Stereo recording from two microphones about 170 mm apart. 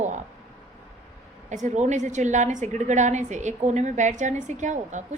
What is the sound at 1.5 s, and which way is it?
A woman's voice, 45° right (ahead or behind).